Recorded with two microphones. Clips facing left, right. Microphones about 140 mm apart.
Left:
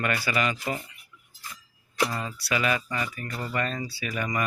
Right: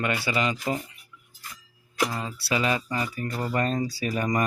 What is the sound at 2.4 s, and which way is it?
Speech, 30° right (ahead or behind).